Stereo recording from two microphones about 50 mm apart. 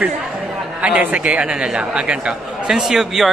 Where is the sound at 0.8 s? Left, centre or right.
Right.